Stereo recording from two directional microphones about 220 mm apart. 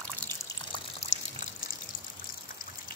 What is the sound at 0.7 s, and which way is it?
Water, 30° left (ahead or behind).